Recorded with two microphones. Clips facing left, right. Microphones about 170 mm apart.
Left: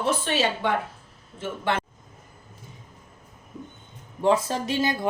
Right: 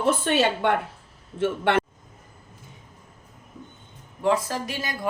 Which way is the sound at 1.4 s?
65° right (ahead or behind).